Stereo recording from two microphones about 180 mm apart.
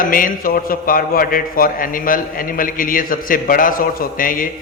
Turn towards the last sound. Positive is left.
turn(degrees=50)  # may be behind; listen again after turning